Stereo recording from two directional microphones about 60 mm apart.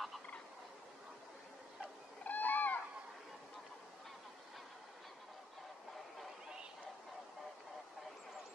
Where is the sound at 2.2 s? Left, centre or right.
Left.